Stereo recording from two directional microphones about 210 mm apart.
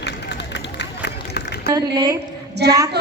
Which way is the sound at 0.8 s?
50° left (ahead or behind).